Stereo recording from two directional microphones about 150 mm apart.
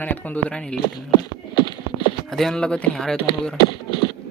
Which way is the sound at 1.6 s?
30° left (ahead or behind).